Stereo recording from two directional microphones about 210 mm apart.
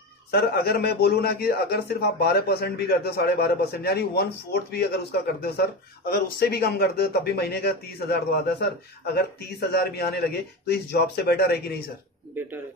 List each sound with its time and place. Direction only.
0.3 s a man's voice: 50° left (ahead or behind)